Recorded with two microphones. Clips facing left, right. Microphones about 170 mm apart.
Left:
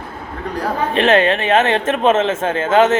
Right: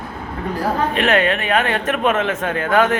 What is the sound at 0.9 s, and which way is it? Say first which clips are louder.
Speech: left 7 dB; 25° left (ahead or behind).